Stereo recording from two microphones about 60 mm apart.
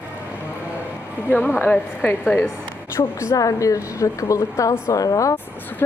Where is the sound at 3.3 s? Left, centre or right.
Left.